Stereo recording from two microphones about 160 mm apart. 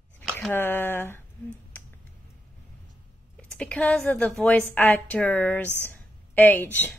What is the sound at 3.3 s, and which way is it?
A woman's voice, 5° left (ahead or behind).